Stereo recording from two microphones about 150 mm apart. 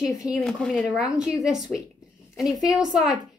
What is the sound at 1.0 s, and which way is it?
A woman's voice, 5° right (ahead or behind).